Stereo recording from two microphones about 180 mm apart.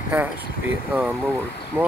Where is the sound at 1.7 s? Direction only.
10° right (ahead or behind).